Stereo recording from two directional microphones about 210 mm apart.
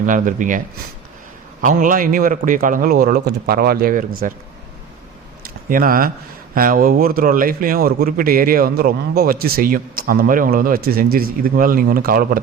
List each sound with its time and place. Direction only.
0.0 s a man's voice: 40° right (ahead or behind)
1.6 s a man's voice: 40° right (ahead or behind)
5.4 s a sound: 40° right (ahead or behind)
6.5 s a man's voice: 40° right (ahead or behind)